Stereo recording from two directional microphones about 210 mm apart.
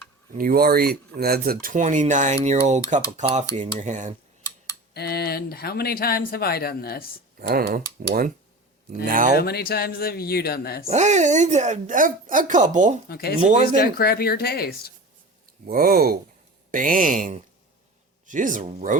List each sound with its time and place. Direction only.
0.3 s speech: 45° right (ahead or behind)
4.4 s a sound: 15° left (ahead or behind)
4.9 s speech: 50° left (ahead or behind)
7.3 s speech: 45° right (ahead or behind)
9.4 s speech: 45° left (ahead or behind)
10.8 s speech: 35° right (ahead or behind)
13.1 s speech: 45° left (ahead or behind)
13.4 s speech: 35° right (ahead or behind)
13.7 s speech: 45° left (ahead or behind)
15.6 s speech: 45° right (ahead or behind)